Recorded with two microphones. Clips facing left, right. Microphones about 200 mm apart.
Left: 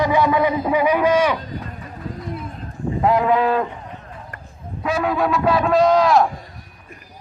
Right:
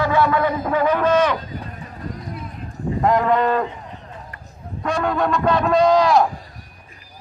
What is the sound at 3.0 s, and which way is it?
Speech, 5° left (ahead or behind).